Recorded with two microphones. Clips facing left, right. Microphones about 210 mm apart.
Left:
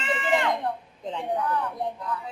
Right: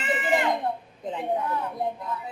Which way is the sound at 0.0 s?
15° right (ahead or behind).